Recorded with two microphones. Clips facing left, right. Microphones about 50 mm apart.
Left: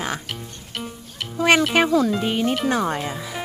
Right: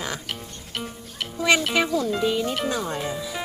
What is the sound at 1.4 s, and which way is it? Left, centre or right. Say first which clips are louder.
Speech: left 4 dB; left.